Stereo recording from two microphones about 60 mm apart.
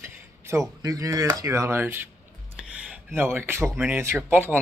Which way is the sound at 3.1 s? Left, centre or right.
Right.